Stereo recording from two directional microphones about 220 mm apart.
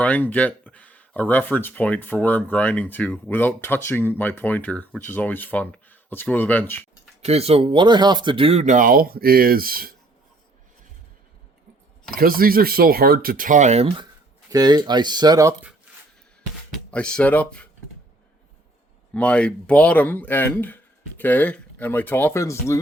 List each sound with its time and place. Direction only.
0.0 s speech: 5° left (ahead or behind)
7.3 s speech: 30° right (ahead or behind)
12.1 s speech: 40° right (ahead or behind); by 15.7 s 15° right (ahead or behind)
16.7 s speech: 5° left (ahead or behind)
19.1 s speech: 5° left (ahead or behind)